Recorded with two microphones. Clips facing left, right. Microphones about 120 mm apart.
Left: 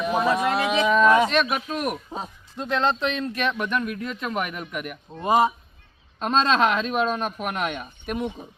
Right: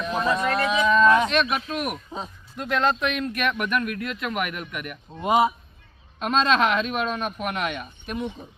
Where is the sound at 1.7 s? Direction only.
Centre (ahead or behind).